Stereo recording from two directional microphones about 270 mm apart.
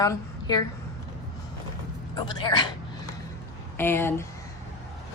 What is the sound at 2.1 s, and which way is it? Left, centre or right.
Speech, centre.